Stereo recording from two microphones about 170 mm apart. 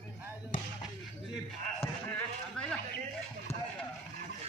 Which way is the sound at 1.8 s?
10° left (ahead or behind).